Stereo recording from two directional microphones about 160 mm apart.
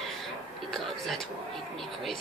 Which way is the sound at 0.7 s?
Centre (ahead or behind).